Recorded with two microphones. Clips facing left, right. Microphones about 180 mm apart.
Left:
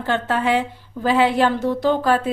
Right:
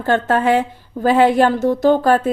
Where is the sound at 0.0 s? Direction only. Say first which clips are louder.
Right 5 dB; 45° right (ahead or behind).